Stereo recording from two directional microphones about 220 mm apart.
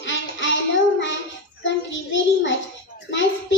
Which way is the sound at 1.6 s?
55° left (ahead or behind).